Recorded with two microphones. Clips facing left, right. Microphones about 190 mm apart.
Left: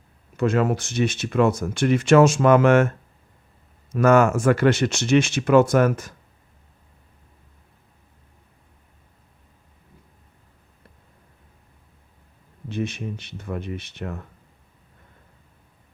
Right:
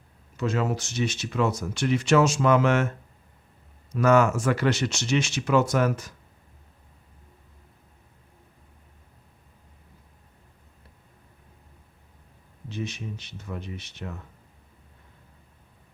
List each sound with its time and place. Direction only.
0.3 s speech: 55° left (ahead or behind)
3.9 s speech: 50° left (ahead or behind)
12.6 s speech: 55° left (ahead or behind)